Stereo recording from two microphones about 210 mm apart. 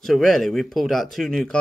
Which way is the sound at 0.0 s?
Centre (ahead or behind).